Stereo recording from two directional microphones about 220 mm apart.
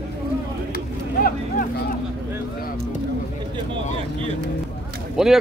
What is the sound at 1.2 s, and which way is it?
Vehicle, 40° left (ahead or behind).